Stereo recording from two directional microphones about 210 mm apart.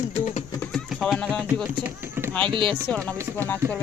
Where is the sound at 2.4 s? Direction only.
25° right (ahead or behind).